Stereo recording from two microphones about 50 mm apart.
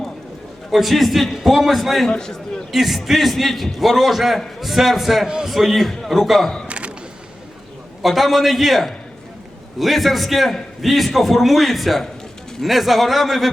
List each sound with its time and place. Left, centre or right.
0.7 s a man's voice: centre
2.0 s a man's voice: centre
2.7 s a man's voice: centre
6.7 s a sound: right
8.0 s a man's voice: centre